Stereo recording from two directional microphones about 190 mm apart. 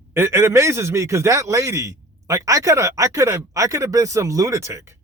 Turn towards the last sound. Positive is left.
turn(degrees=-15)  # may be behind; listen again after turning